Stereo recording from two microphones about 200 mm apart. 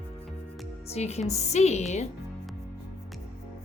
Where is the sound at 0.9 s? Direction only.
35° left (ahead or behind).